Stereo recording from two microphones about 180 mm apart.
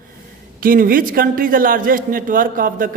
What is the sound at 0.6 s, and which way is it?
A woman's voice, 50° right (ahead or behind).